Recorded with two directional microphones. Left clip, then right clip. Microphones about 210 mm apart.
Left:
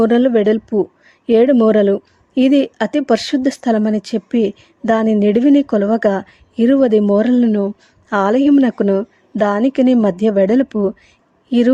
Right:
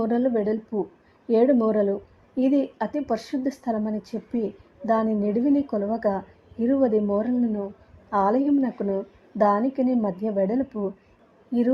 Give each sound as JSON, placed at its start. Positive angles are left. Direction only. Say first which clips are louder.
{"t": 0.0, "sound": "a woman's voice", "louder": "left 11 dB", "side_deg": 35}